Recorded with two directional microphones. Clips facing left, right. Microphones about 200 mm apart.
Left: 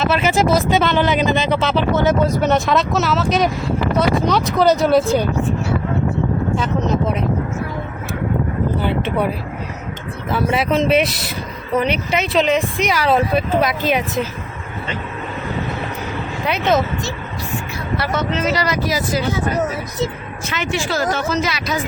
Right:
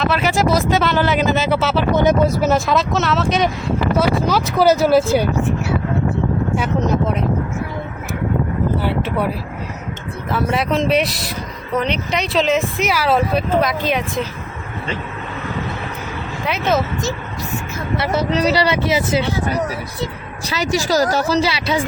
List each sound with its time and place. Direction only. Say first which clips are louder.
0.0 s speech: left 1 dB; centre (ahead or behind)
8.8 s speech: left 1 dB; 5° right (ahead or behind)
10.3 s speech: left 1 dB; centre (ahead or behind)
16.5 s speech: left 1 dB; centre (ahead or behind)
17.9 s speech: right 2 dB; 25° right (ahead or behind)
20.4 s a woman's voice: right 3 dB; 35° right (ahead or behind)